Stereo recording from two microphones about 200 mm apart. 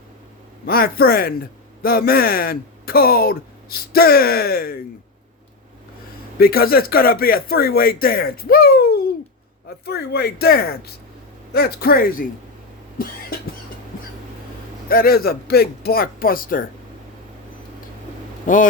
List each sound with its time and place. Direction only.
0.6 s a man's voice: 50° left (ahead or behind)
6.4 s a man's voice: 50° left (ahead or behind)
14.8 s a man's voice: 50° left (ahead or behind)
18.4 s speech: 40° left (ahead or behind)